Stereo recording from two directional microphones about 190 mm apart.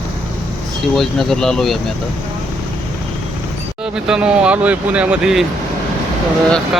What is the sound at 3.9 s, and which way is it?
Speech, 5° right (ahead or behind).